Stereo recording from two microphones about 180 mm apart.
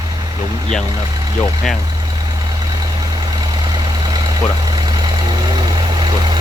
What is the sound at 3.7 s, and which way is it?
Vehicle, 25° right (ahead or behind).